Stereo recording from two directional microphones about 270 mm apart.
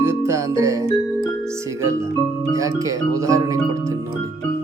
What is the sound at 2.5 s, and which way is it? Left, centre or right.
Music, centre.